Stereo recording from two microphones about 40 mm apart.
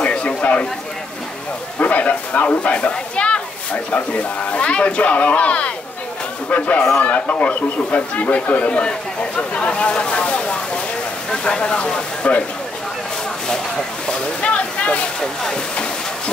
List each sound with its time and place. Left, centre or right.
0.0 s a sound: left
1.8 s speech: left
9.4 s a sound: left
11.2 s speech: left
14.0 s speech: left
15.1 s speech: centre